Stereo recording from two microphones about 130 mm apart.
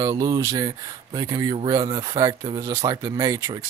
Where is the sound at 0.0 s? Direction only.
30° right (ahead or behind).